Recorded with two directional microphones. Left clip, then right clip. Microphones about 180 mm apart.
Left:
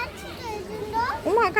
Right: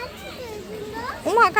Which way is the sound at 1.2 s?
Centre (ahead or behind).